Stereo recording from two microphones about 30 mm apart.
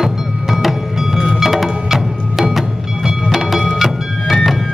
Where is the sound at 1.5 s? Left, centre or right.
Centre.